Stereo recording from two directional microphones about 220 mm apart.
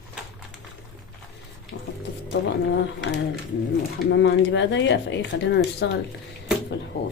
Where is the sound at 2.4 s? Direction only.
50° left (ahead or behind).